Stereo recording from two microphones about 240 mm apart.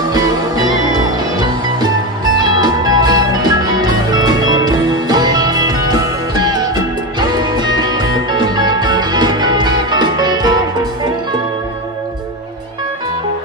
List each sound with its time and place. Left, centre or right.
2.3 s music: centre